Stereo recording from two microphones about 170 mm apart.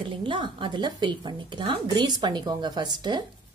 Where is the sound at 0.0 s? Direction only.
30° right (ahead or behind).